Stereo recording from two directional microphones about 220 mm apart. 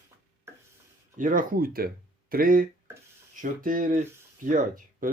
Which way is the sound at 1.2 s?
40° right (ahead or behind).